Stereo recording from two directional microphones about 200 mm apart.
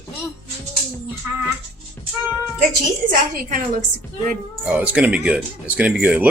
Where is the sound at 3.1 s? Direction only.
45° right (ahead or behind).